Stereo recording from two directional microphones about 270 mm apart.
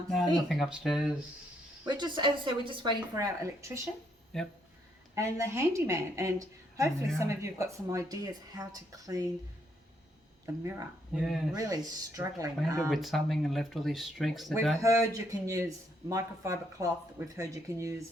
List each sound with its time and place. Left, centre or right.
0.4 s speech: centre
1.9 s a man's voice: centre
4.3 s speech: centre
5.1 s a man's voice: centre
10.4 s a man's voice: centre
12.9 s speech: centre
14.8 s a man's voice: centre